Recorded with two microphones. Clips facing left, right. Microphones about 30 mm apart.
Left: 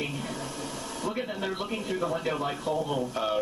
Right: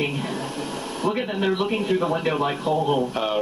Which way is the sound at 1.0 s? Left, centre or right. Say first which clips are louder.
Right 9 dB; right.